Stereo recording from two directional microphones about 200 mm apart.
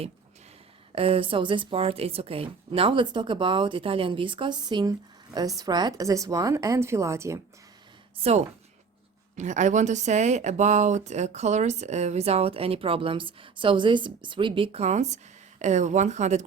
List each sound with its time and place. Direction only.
0.9 s speech: 30° right (ahead or behind)
8.2 s a woman's voice: 30° right (ahead or behind)